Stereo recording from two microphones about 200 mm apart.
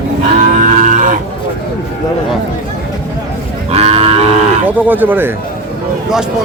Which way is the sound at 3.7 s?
30° right (ahead or behind).